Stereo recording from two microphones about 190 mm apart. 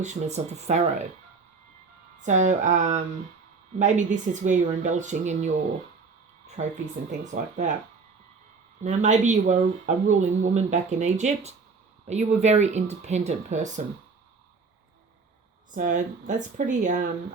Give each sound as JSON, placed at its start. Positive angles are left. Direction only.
{"t": 0.0, "sound": "speech", "side_deg": -40}
{"t": 2.2, "sound": "speech", "side_deg": -40}
{"t": 6.6, "sound": "speech", "side_deg": -35}
{"t": 8.8, "sound": "speech", "side_deg": -40}
{"t": 15.7, "sound": "speech", "side_deg": -40}